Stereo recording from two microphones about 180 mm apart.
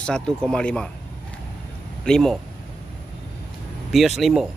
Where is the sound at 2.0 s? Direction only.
5° left (ahead or behind).